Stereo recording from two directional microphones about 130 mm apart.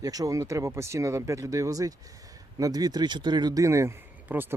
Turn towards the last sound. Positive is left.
turn(degrees=-15)  # may be behind; listen again after turning